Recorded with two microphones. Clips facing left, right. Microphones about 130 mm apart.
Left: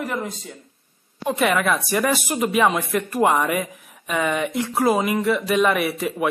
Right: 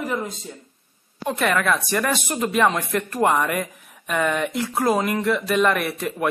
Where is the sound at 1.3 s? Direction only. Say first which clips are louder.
Left 1 dB; 5° left (ahead or behind).